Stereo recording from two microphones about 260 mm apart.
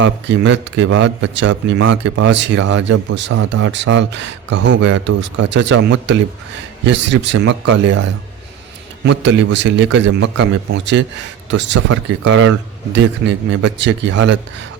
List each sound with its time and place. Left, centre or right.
0.0 s speech: right
9.0 s speech: right